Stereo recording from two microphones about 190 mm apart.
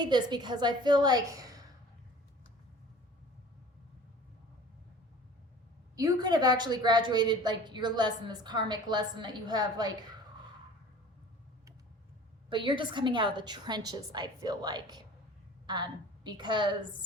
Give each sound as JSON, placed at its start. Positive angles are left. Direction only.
{"t": 0.0, "sound": "a woman's voice", "side_deg": -20}
{"t": 6.0, "sound": "a woman's voice", "side_deg": -20}
{"t": 12.5, "sound": "a woman's voice", "side_deg": -25}